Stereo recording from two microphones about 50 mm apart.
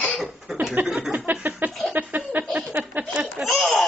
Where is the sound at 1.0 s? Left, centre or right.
Right.